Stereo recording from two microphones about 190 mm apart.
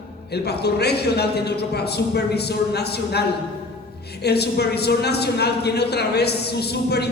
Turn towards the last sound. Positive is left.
turn(degrees=60)  # may be behind; listen again after turning